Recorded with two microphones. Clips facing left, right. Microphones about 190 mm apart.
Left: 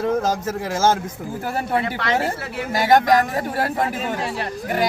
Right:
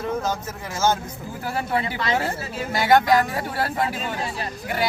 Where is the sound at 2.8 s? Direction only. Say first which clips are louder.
Left 2 dB; 40° left (ahead or behind).